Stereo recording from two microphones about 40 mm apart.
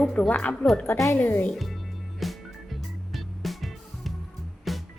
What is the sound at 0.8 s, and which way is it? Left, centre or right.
Speech, left.